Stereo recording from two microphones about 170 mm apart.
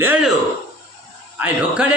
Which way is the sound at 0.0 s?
10° right (ahead or behind).